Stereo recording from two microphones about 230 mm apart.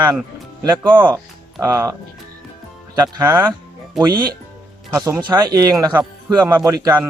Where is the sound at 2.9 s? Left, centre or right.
Centre.